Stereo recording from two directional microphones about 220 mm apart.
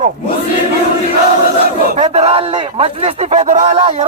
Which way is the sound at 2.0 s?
30° right (ahead or behind).